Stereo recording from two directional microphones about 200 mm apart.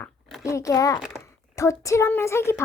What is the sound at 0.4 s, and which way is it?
A child's voice, 15° left (ahead or behind).